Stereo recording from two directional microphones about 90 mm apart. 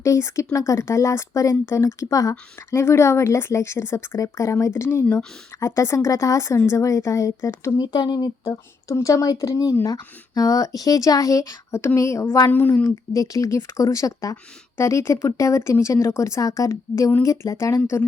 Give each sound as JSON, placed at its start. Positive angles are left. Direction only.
{"t": 0.0, "sound": "speech", "side_deg": 35}
{"t": 7.8, "sound": "speech", "side_deg": 50}
{"t": 8.4, "sound": "speech", "side_deg": 35}
{"t": 12.5, "sound": "speech", "side_deg": 20}
{"t": 12.8, "sound": "speech", "side_deg": 40}